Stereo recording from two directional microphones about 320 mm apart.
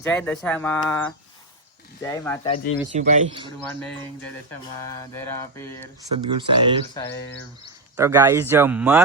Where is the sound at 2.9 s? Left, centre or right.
Centre.